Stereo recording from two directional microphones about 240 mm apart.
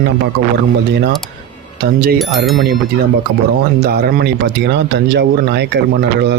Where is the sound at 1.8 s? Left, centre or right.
Right.